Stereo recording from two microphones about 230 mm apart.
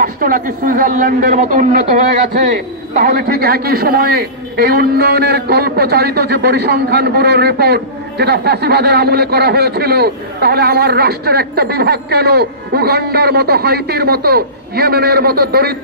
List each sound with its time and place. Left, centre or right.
0.0 s a man's voice: right